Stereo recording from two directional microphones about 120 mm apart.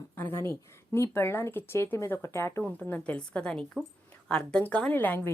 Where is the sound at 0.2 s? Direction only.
20° left (ahead or behind).